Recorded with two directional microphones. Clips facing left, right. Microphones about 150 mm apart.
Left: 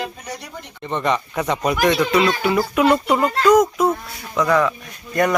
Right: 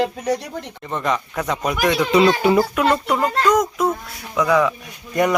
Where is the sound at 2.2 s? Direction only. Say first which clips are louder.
Right 4 dB; 30° right (ahead or behind).